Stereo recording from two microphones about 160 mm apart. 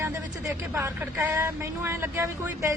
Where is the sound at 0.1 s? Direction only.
15° right (ahead or behind).